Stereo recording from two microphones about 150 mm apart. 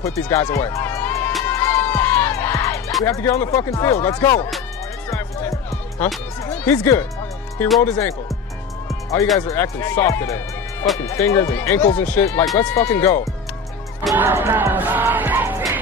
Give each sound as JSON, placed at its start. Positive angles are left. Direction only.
{"t": 0.0, "sound": "speech", "side_deg": 15}
{"t": 1.5, "sound": "music", "side_deg": 15}
{"t": 3.1, "sound": "speech", "side_deg": 15}
{"t": 5.1, "sound": "music", "side_deg": 15}
{"t": 6.4, "sound": "speech", "side_deg": 10}
{"t": 8.8, "sound": "music", "side_deg": 20}
{"t": 9.6, "sound": "speech", "side_deg": 15}
{"t": 14.1, "sound": "music", "side_deg": -15}